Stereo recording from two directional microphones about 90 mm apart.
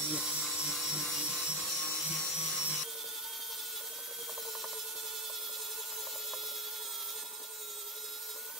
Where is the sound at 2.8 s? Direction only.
5° right (ahead or behind).